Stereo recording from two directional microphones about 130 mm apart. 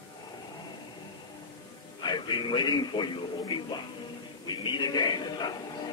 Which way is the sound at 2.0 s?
35° left (ahead or behind).